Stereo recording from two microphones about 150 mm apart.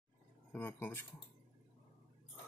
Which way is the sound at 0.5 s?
15° left (ahead or behind).